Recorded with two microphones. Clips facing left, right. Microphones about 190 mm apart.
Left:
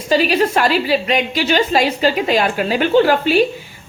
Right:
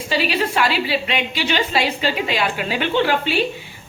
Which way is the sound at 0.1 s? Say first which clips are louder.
Left 6 dB; 45° left (ahead or behind).